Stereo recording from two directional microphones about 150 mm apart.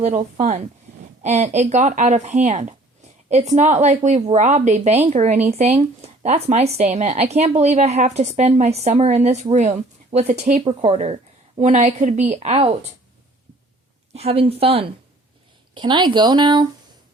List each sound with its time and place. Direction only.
0.0 s speech: 50° right (ahead or behind)
14.1 s speech: 45° right (ahead or behind)